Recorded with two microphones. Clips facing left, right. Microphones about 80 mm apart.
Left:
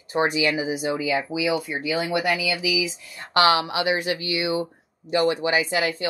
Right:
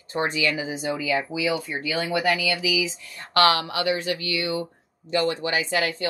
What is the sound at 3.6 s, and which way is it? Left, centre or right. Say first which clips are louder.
Speech: left 2 dB; left.